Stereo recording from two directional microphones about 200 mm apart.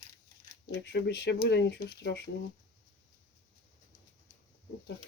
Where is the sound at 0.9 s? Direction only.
55° left (ahead or behind).